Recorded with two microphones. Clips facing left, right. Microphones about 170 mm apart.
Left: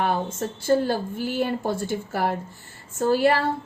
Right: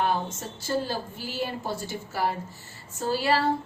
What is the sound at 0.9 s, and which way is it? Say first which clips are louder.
A woman's voice: left 7 dB; 55° left (ahead or behind).